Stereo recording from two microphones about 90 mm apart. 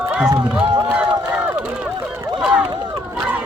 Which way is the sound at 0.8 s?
10° right (ahead or behind).